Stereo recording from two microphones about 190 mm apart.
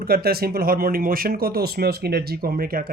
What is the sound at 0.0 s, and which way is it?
Speech, 55° right (ahead or behind).